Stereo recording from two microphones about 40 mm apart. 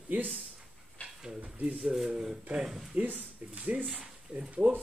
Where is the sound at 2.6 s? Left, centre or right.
Centre.